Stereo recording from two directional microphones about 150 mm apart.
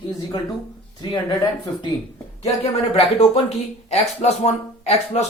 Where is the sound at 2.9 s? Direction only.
40° left (ahead or behind).